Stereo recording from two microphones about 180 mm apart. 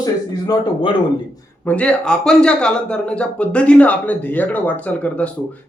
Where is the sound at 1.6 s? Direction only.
5° left (ahead or behind).